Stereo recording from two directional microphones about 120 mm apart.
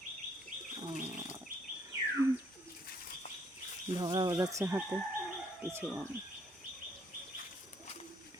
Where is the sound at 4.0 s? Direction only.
35° right (ahead or behind).